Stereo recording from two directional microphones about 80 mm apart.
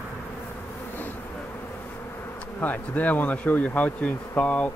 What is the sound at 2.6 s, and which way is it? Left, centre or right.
Speech, left.